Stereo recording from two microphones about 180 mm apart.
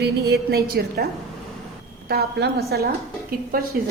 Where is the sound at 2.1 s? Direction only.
65° right (ahead or behind).